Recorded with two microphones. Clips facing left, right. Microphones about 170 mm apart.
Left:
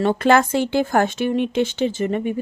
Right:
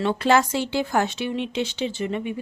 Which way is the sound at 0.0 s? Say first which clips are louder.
Left 4 dB; 50° left (ahead or behind).